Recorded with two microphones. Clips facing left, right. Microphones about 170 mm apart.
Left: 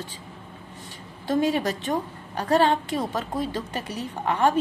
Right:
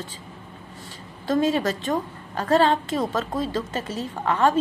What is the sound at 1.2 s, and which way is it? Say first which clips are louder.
A woman's voice: right 1 dB; 15° left (ahead or behind).